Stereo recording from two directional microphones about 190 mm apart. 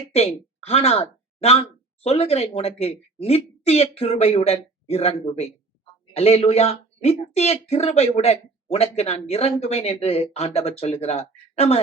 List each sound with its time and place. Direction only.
0.1 s speech: 30° left (ahead or behind)